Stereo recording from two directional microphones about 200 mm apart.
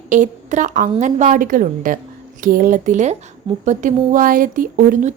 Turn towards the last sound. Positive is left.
turn(degrees=-45)  # may be behind; listen again after turning